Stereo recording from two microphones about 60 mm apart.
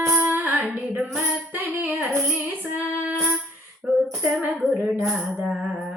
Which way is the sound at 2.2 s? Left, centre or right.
Right.